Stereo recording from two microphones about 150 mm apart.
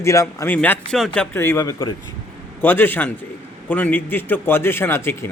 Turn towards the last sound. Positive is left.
turn(degrees=15)  # may be behind; listen again after turning